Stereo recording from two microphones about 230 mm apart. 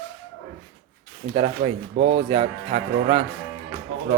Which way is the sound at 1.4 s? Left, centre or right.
Right.